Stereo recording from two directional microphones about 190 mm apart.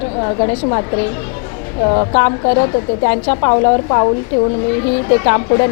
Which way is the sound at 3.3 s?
30° left (ahead or behind).